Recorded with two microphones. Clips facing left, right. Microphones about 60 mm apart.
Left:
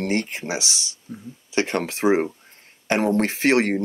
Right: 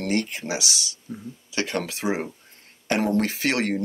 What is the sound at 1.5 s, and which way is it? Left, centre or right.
Speech, left.